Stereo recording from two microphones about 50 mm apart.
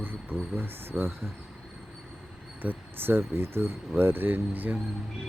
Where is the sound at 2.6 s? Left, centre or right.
Right.